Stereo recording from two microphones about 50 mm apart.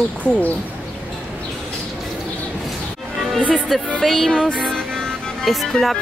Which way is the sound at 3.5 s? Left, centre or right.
Centre.